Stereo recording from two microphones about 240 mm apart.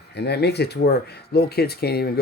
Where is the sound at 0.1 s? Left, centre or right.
Left.